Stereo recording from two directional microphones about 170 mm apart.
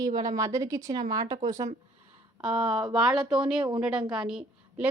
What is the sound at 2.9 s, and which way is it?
A woman's voice, centre (ahead or behind).